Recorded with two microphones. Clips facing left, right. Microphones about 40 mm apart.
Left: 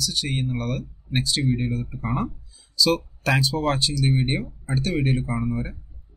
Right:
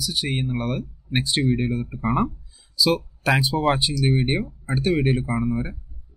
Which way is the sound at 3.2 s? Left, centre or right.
Centre.